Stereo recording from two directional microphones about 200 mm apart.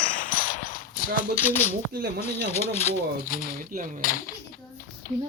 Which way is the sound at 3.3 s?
45° left (ahead or behind).